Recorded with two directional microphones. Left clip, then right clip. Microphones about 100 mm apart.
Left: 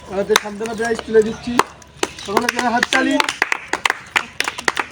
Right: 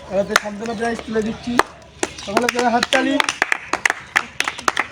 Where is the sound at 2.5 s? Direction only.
10° right (ahead or behind).